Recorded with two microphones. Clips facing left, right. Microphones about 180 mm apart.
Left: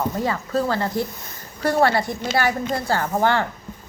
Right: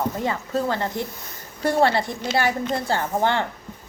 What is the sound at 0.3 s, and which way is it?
Speech, 20° right (ahead or behind).